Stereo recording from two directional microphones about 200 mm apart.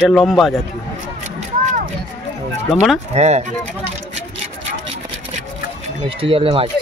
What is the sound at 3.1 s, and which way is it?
Speech, 35° right (ahead or behind).